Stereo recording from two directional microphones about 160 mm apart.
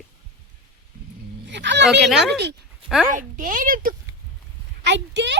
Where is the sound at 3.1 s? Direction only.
55° right (ahead or behind).